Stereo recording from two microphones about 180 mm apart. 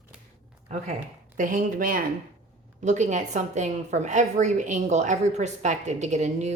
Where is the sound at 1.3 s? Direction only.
50° right (ahead or behind).